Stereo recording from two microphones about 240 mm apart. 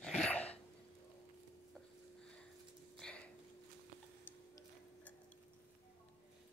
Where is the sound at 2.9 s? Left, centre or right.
Centre.